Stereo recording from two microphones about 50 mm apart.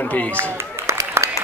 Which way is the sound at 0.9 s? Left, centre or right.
Right.